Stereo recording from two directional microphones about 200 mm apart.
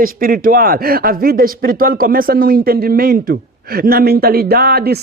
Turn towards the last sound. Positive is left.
turn(degrees=-50)  # may be behind; listen again after turning